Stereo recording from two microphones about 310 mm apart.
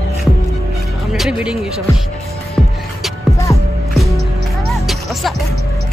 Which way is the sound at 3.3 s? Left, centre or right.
Centre.